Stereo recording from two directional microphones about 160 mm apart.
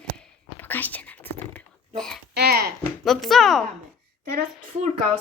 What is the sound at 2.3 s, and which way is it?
Babbling, 80° right.